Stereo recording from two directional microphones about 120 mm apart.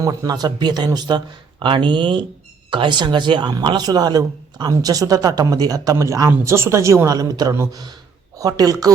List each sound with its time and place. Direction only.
0.0 s a man's voice: 30° right (ahead or behind)